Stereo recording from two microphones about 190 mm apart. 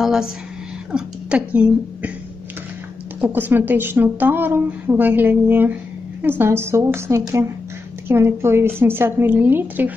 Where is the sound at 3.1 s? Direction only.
10° right (ahead or behind).